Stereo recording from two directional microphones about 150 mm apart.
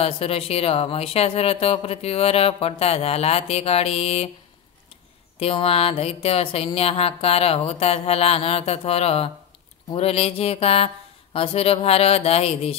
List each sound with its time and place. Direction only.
0.0 s speech: 40° left (ahead or behind)
5.4 s speech: 40° left (ahead or behind)